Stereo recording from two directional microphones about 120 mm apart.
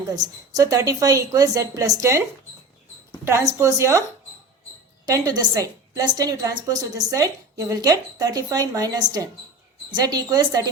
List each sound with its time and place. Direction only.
0.2 s a woman's voice: 30° right (ahead or behind)
3.2 s a woman's voice: 25° right (ahead or behind)
5.0 s a woman's voice: 30° right (ahead or behind)